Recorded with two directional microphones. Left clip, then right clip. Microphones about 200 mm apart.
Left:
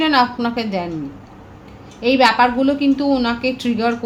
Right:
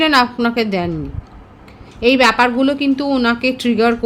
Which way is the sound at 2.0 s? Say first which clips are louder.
Right 1 dB; 55° right (ahead or behind).